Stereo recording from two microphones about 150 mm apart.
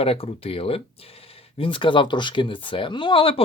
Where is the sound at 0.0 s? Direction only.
40° left (ahead or behind).